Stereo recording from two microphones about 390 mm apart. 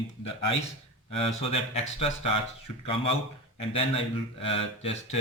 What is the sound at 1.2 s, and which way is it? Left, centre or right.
Speech, centre.